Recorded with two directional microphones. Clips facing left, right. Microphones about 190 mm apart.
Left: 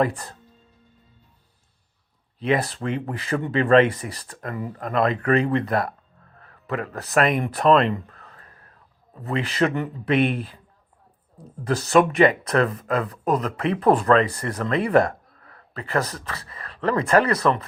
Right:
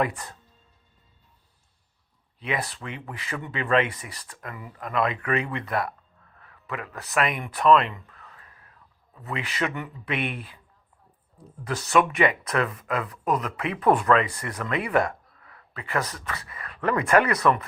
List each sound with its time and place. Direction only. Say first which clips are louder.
0.0 s speech: left 4 dB; 30° left (ahead or behind)
2.4 s speech: left 8 dB; 35° left (ahead or behind)
11.6 s speech: left 4 dB; 35° left (ahead or behind)